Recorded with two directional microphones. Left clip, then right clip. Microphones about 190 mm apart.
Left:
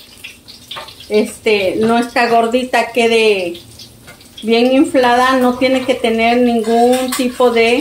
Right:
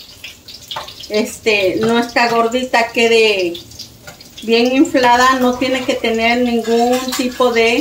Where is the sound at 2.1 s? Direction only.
40° left (ahead or behind).